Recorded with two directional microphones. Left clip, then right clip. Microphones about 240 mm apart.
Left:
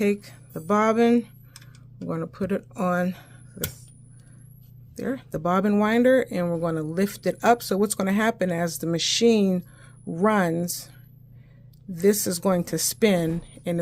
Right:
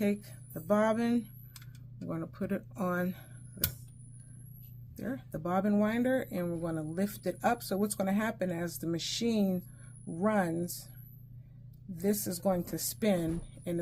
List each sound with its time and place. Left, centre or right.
0.0 s speech: left
4.9 s speech: left
11.9 s speech: left